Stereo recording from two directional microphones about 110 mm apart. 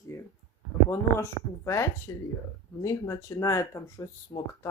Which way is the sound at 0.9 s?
25° left (ahead or behind).